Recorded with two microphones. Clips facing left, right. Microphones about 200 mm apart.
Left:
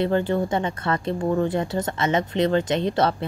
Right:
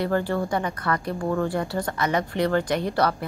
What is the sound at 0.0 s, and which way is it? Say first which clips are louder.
Speech: left 3 dB; 20° left (ahead or behind).